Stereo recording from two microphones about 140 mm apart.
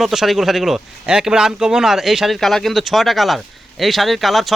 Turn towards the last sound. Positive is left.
turn(degrees=0)  # may be behind; listen again after turning